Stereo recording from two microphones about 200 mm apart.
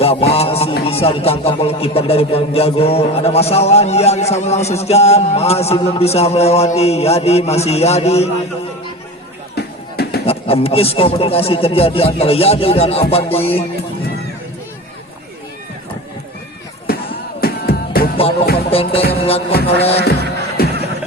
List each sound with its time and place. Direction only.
0.0 s speech: 30° left (ahead or behind)
9.6 s music: 55° left (ahead or behind)
10.2 s speech: 30° left (ahead or behind)
16.9 s music: 50° left (ahead or behind)
18.7 s speech: 30° left (ahead or behind)
20.6 s music: 50° left (ahead or behind)